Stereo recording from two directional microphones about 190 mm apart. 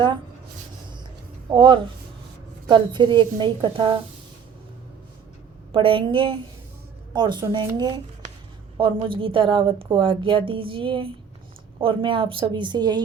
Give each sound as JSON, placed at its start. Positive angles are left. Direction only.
{"t": 1.5, "sound": "a woman's voice", "side_deg": -25}
{"t": 5.7, "sound": "a woman's voice", "side_deg": -25}